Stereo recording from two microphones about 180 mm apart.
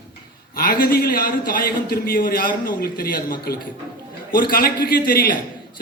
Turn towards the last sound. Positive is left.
turn(degrees=55)  # may be behind; listen again after turning